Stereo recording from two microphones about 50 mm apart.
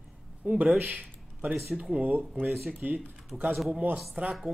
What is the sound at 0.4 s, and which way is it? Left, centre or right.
Speech, right.